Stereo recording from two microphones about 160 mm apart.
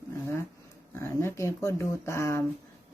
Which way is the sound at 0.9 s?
15° left (ahead or behind).